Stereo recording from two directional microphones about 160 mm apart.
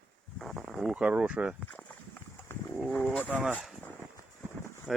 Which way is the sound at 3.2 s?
5° right (ahead or behind).